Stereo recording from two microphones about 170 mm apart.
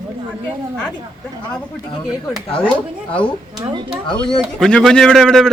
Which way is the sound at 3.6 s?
30° right (ahead or behind).